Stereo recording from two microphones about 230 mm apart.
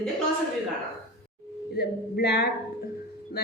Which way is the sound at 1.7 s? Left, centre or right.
Left.